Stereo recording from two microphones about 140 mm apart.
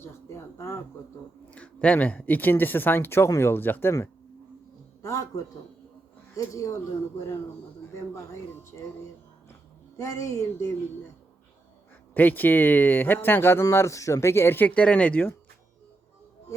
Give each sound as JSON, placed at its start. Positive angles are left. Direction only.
{"t": 0.0, "sound": "a sound", "side_deg": 20}
{"t": 1.5, "sound": "speech", "side_deg": 10}
{"t": 7.9, "sound": "speech", "side_deg": 20}
{"t": 10.0, "sound": "speech", "side_deg": 20}
{"t": 12.1, "sound": "speech", "side_deg": 15}